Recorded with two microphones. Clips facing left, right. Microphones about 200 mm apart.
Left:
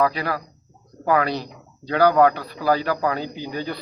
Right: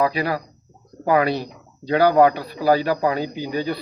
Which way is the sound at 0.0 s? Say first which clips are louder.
Right 1 dB; 15° right (ahead or behind).